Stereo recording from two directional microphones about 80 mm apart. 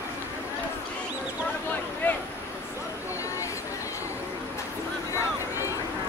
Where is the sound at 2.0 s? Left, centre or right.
Left.